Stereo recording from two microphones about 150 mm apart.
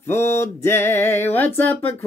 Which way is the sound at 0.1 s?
15° left (ahead or behind).